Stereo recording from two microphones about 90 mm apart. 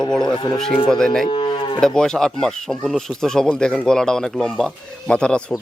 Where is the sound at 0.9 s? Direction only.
5° left (ahead or behind).